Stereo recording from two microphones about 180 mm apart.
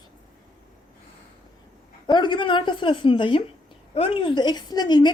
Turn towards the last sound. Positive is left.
turn(degrees=25)  # may be behind; listen again after turning